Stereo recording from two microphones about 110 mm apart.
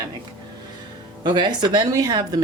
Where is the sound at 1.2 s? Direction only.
45° right (ahead or behind).